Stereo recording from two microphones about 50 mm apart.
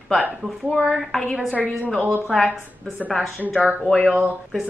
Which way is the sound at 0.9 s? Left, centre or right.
Centre.